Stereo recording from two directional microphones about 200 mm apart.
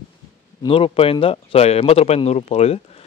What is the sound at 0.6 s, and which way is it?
A man's voice, 25° left (ahead or behind).